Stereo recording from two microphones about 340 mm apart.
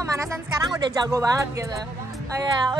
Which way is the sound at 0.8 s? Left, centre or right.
Centre.